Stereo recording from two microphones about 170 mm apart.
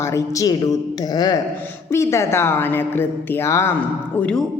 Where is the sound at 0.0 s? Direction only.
20° left (ahead or behind).